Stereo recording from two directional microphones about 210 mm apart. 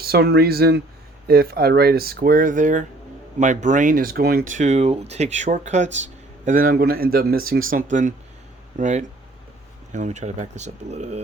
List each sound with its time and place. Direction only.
0.0 s speech: 50° right (ahead or behind); by 11.2 s 30° right (ahead or behind)